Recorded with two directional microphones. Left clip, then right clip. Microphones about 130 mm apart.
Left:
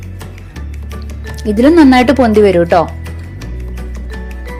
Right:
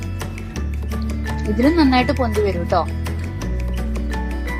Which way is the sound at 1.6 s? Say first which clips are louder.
Left 9 dB; 65° left (ahead or behind).